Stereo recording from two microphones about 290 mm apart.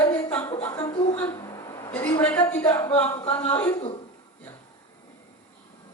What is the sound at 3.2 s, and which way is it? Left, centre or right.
Speech, left.